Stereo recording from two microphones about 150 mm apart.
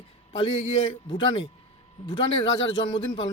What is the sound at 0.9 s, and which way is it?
Speech, 35° left (ahead or behind).